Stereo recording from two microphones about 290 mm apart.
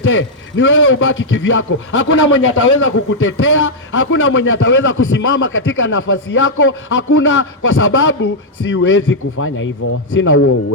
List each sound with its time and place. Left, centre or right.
0.0 s a man's voice: left